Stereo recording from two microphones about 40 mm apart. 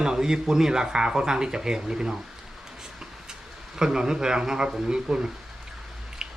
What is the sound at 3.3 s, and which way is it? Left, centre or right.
Speech, centre.